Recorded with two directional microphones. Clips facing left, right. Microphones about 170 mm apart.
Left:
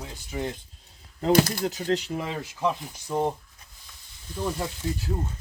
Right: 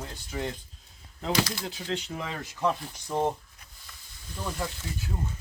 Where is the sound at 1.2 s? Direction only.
50° left (ahead or behind).